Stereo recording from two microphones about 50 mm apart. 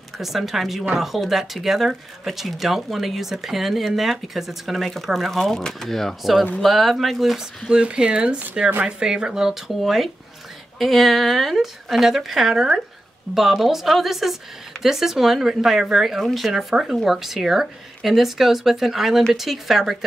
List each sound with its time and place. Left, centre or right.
0.2 s speech: centre
5.4 s speech: centre
7.7 s speech: right; by 20.0 s centre